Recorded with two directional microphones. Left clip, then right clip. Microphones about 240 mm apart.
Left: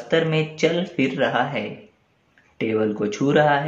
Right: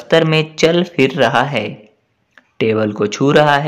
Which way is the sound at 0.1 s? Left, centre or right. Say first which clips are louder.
Right 8 dB; right.